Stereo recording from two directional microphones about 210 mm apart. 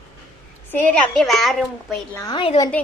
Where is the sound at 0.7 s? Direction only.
5° left (ahead or behind).